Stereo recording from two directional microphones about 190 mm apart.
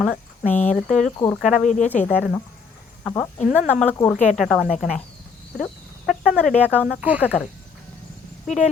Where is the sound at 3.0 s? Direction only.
15° left (ahead or behind).